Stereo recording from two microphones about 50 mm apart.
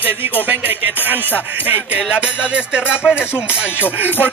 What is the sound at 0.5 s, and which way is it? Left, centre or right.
Music, right.